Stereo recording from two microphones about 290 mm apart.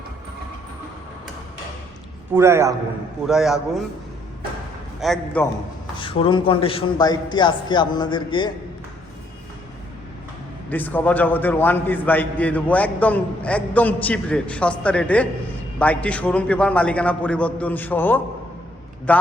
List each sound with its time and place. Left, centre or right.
2.3 s a man's voice: centre
4.9 s a man's voice: centre
6.0 s a man's voice: centre
10.7 s a man's voice: centre